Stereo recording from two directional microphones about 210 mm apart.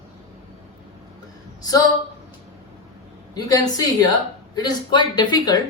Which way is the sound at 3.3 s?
20° left (ahead or behind).